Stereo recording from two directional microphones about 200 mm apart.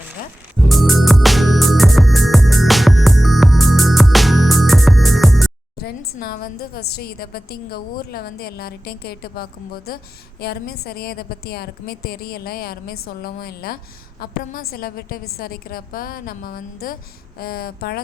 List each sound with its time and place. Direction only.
0.7 s music: centre (ahead or behind)
5.8 s a woman's voice: 50° left (ahead or behind)